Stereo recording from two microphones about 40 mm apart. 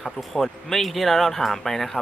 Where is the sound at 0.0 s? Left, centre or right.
Centre.